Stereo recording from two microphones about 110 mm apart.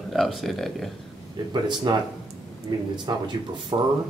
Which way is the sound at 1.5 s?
45° right (ahead or behind).